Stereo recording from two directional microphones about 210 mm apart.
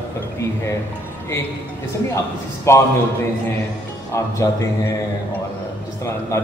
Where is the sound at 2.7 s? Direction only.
15° left (ahead or behind).